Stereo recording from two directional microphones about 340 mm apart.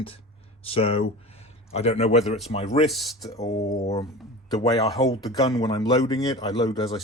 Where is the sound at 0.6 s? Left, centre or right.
Centre.